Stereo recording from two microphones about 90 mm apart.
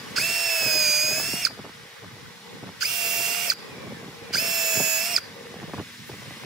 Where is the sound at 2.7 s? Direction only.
5° right (ahead or behind).